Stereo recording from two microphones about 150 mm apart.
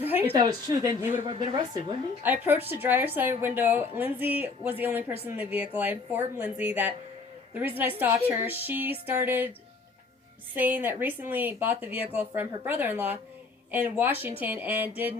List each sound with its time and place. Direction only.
0.0 s speech: 15° right (ahead or behind)
0.3 s speech: 25° right (ahead or behind)
2.2 s speech: 15° right (ahead or behind)
10.5 s speech: 15° right (ahead or behind)